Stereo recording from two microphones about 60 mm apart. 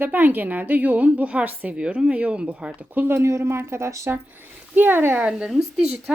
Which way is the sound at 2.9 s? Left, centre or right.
Right.